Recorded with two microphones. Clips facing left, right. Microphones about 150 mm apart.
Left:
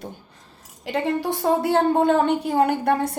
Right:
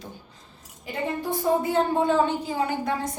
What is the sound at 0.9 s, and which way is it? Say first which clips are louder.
A woman's voice: left 5 dB; 80° left.